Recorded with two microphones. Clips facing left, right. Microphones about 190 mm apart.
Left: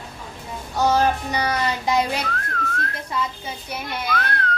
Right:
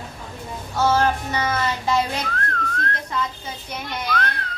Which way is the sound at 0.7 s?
15° left (ahead or behind).